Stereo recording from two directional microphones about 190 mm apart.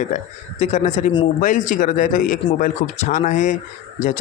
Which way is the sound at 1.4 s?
45° left (ahead or behind).